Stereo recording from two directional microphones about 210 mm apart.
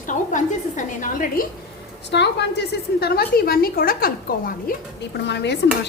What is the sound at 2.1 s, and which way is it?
A woman's voice, 55° left (ahead or behind).